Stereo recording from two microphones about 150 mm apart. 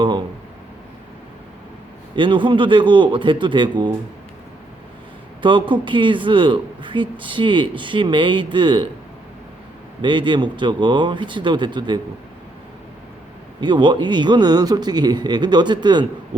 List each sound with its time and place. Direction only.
2.1 s speech: 35° right (ahead or behind)
5.4 s speech: 35° right (ahead or behind)
10.0 s speech: 35° right (ahead or behind)
13.6 s speech: 30° right (ahead or behind)